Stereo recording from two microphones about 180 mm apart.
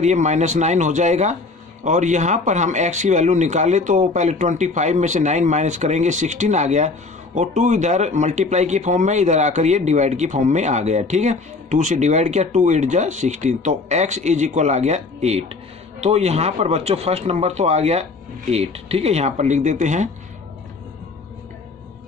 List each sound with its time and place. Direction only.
0.0 s speech: 40° right (ahead or behind)